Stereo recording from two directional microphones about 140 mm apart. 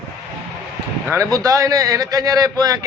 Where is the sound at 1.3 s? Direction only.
25° right (ahead or behind).